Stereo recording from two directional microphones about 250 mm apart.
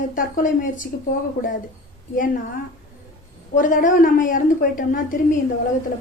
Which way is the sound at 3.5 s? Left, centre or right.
Left.